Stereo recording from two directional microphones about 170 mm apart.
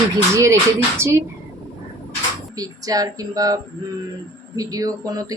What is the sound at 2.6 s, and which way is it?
Speech, 20° right (ahead or behind).